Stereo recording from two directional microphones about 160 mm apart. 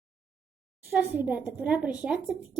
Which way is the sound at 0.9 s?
10° right (ahead or behind).